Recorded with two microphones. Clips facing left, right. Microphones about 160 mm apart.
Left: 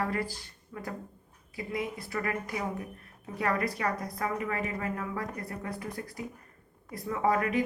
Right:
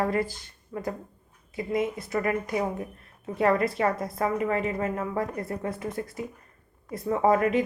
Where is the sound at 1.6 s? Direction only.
20° right (ahead or behind).